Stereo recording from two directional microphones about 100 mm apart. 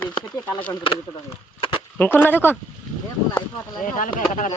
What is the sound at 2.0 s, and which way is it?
Speech, 20° left (ahead or behind).